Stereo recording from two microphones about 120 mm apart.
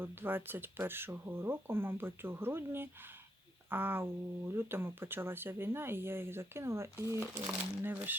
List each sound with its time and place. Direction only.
0.0 s speech: 15° right (ahead or behind)